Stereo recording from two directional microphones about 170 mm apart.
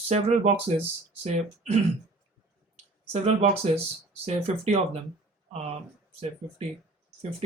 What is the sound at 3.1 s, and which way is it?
Speech, 35° right (ahead or behind).